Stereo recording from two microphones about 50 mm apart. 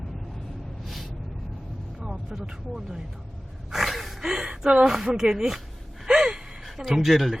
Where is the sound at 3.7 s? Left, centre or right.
Centre.